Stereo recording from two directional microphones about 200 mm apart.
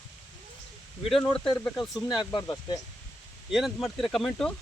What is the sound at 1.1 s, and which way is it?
Speech, 5° left (ahead or behind).